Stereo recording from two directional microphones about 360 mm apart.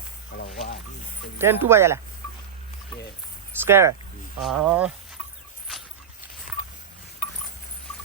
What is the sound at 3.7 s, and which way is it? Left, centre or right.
Speech, centre.